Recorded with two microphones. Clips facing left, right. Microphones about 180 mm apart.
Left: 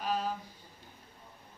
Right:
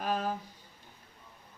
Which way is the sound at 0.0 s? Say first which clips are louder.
Right 1 dB; 50° right (ahead or behind).